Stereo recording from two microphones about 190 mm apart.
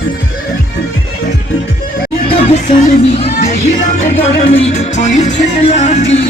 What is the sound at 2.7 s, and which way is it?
Music, 35° left (ahead or behind).